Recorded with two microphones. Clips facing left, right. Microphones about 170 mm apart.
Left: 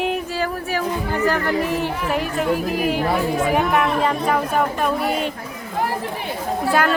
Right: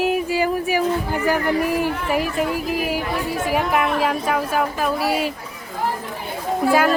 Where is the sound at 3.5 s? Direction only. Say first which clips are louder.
Right 2 dB; 5° right (ahead or behind).